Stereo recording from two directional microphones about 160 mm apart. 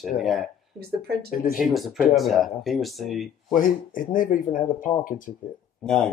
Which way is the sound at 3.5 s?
55° left (ahead or behind).